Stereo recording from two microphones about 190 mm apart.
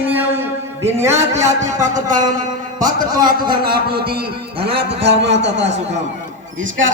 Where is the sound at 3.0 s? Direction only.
45° right (ahead or behind).